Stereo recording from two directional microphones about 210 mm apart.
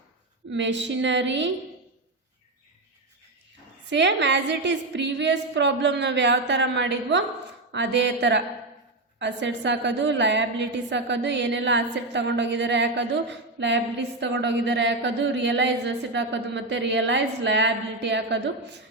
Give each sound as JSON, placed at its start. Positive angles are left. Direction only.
{"t": 0.5, "sound": "a woman's voice", "side_deg": -60}
{"t": 3.8, "sound": "a woman's voice", "side_deg": -55}